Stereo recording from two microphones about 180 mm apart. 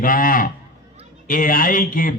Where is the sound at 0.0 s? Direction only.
50° left (ahead or behind).